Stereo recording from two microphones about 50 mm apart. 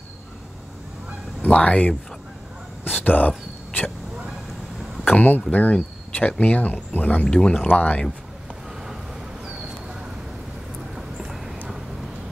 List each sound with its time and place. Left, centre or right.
1.4 s speech: left
2.8 s whispering: left
5.0 s speech: left
7.6 s speech: left
11.0 s a sound: centre